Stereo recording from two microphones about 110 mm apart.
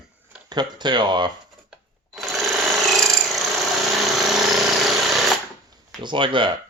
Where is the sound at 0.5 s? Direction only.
40° right (ahead or behind).